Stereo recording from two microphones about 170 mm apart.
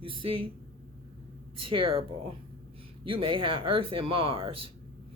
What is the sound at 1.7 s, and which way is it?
Speech, 30° right (ahead or behind).